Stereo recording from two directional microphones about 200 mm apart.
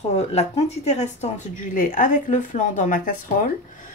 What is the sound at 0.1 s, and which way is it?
Speech, 30° left (ahead or behind).